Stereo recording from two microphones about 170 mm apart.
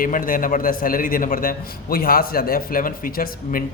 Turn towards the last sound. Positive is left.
turn(degrees=55)  # may be behind; listen again after turning